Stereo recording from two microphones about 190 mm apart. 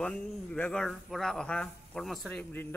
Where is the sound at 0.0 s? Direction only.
5° left (ahead or behind).